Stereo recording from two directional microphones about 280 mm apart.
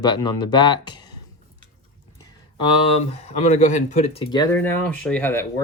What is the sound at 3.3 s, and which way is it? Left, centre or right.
Speech, left.